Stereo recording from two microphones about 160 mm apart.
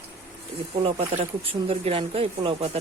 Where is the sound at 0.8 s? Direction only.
35° right (ahead or behind).